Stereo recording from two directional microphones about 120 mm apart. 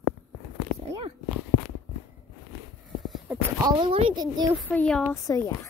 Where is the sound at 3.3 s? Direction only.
15° right (ahead or behind).